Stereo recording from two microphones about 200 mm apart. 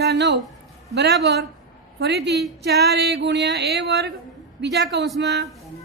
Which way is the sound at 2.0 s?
55° right (ahead or behind).